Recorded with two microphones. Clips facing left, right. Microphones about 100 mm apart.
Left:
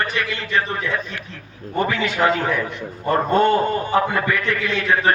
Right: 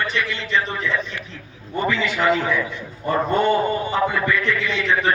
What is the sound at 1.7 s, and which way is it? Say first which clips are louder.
A man's voice: left 1 dB; 55° left (ahead or behind).